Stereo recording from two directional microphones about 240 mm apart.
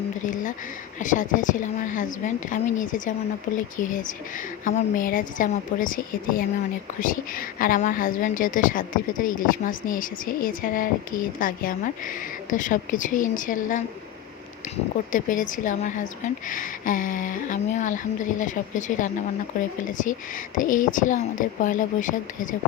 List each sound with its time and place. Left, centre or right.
0.9 s a woman's voice: left
15.1 s a woman's voice: left